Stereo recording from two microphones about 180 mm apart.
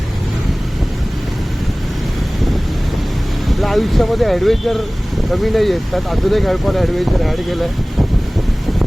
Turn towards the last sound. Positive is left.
turn(degrees=0)  # may be behind; listen again after turning